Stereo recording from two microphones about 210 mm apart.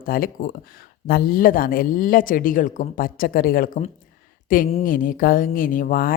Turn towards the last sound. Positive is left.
turn(degrees=40)  # may be behind; listen again after turning